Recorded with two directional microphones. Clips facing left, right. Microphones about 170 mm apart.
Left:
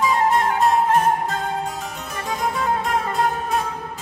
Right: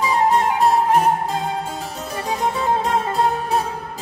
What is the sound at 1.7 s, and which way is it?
Harpsichord, 35° right (ahead or behind).